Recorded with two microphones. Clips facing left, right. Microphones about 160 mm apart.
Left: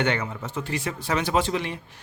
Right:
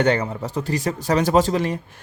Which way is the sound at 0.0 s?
40° right (ahead or behind).